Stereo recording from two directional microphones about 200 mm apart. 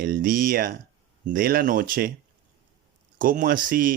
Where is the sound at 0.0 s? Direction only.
45° right (ahead or behind).